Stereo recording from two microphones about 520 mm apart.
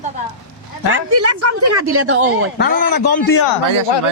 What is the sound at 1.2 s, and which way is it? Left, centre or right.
A woman's voice, right.